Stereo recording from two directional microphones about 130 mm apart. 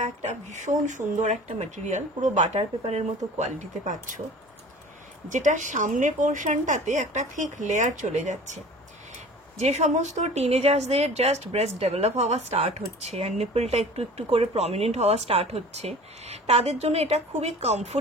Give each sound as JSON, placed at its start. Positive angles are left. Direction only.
{"t": 0.0, "sound": "speech", "side_deg": -60}
{"t": 3.3, "sound": "speech", "side_deg": -70}
{"t": 5.3, "sound": "speech", "side_deg": -70}